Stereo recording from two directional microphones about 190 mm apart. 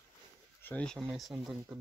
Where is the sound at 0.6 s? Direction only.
10° left (ahead or behind).